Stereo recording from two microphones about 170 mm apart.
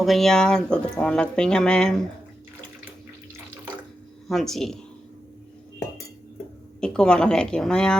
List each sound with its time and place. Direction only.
0.0 s speech: centre (ahead or behind)
4.3 s speech: centre (ahead or behind)
6.7 s speech: 5° left (ahead or behind)